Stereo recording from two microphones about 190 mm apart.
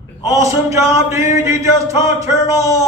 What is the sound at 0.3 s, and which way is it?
Speech, 15° right (ahead or behind).